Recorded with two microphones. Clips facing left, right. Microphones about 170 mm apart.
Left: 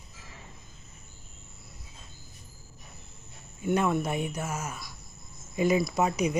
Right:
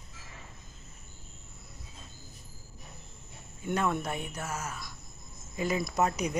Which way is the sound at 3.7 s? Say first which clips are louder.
Left 4 dB; 5° left (ahead or behind).